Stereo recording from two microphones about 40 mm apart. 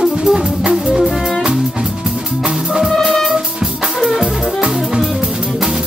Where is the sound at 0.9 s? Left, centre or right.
Centre.